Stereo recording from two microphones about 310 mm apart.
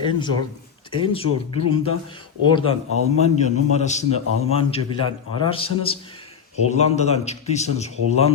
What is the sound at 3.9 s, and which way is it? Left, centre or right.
A man's voice, left.